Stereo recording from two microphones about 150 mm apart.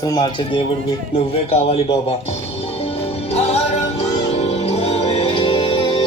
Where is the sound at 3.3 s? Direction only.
45° left (ahead or behind).